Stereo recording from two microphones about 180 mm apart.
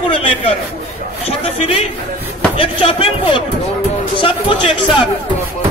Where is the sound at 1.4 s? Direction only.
35° left (ahead or behind).